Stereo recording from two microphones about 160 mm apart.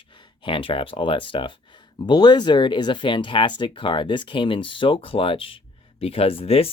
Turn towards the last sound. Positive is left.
turn(degrees=35)  # may be behind; listen again after turning